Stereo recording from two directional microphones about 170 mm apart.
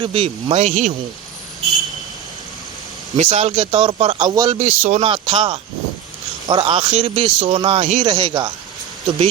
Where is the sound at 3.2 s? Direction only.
45° right (ahead or behind).